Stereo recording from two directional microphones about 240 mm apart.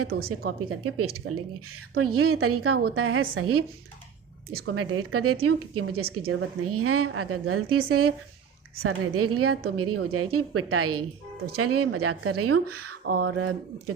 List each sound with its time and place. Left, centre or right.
0.1 s a woman's voice: right
0.7 s a woman's voice: right
1.2 s speech: right
2.0 s a woman's voice: right
4.6 s a woman's voice: right